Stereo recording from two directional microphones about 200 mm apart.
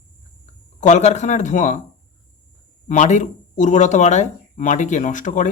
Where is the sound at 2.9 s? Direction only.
35° left (ahead or behind).